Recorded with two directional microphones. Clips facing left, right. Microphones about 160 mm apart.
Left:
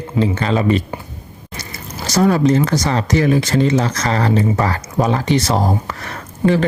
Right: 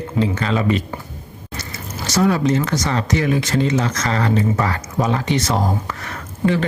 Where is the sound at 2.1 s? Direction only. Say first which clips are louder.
Left 3 dB; 40° left (ahead or behind).